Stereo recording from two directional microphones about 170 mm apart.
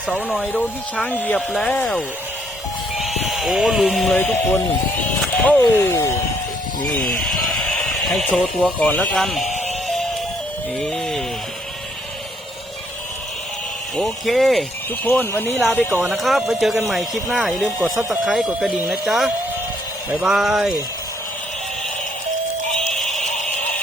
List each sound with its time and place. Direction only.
0.1 s speech: 5° right (ahead or behind)
0.4 s speech: 5° left (ahead or behind)
4.2 s speech: 10° left (ahead or behind)
5.5 s speech: 15° left (ahead or behind)
9.5 s music: 45° left (ahead or behind)
10.8 s music: centre (ahead or behind)
13.9 s speech: centre (ahead or behind)
15.0 s speech: 10° left (ahead or behind)
15.9 s speech: 15° right (ahead or behind)
16.1 s speech: centre (ahead or behind)